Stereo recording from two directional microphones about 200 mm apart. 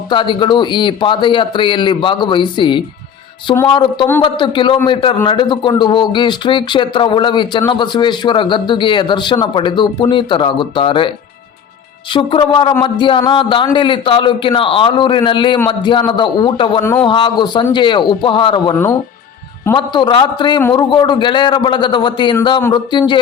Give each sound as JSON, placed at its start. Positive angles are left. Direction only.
{"t": 0.1, "sound": "speech", "side_deg": 25}
{"t": 12.1, "sound": "speech", "side_deg": 25}
{"t": 16.8, "sound": "a man's voice", "side_deg": 10}
{"t": 17.1, "sound": "a man's voice", "side_deg": 25}
{"t": 20.9, "sound": "speech", "side_deg": 20}